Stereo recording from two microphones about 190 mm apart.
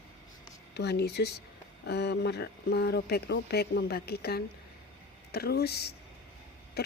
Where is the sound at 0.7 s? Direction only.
60° left (ahead or behind).